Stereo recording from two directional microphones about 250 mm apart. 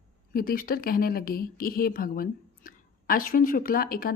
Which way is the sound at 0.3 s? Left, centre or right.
Left.